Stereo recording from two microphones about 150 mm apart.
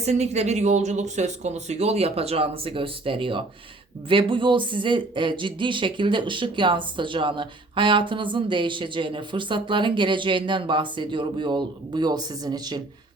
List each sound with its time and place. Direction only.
0.0 s speech: 45° right (ahead or behind); by 12.8 s 30° right (ahead or behind)